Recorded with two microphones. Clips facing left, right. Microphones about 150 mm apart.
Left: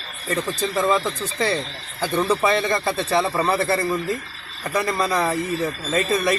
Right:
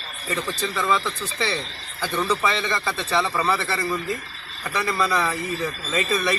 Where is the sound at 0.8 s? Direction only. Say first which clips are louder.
Left 4 dB; 40° left (ahead or behind).